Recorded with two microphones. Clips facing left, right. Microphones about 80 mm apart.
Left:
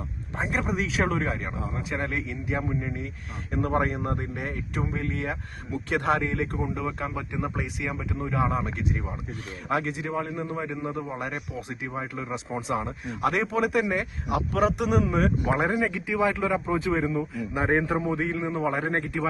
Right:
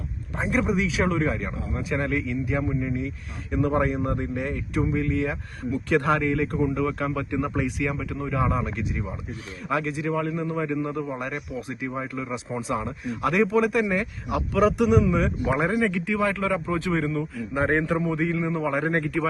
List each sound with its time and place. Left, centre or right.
0.3 s a man's voice: left
6.7 s speech: left
8.2 s a man's voice: left
11.2 s a man's voice: left
15.7 s a man's voice: centre
17.9 s a man's voice: left